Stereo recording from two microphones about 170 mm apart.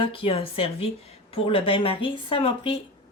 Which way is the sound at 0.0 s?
30° left (ahead or behind).